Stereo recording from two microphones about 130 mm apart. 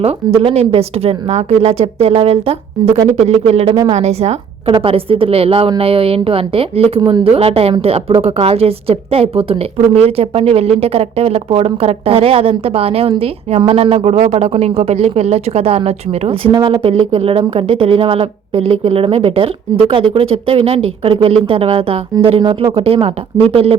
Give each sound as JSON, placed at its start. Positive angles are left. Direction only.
{"t": 0.0, "sound": "a woman's voice", "side_deg": -50}
{"t": 7.0, "sound": "a woman's voice", "side_deg": -30}
{"t": 7.3, "sound": "a woman's voice", "side_deg": -50}